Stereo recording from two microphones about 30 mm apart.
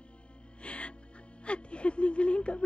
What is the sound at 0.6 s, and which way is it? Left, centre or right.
Music, left.